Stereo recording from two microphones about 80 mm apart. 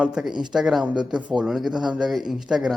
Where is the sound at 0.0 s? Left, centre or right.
Centre.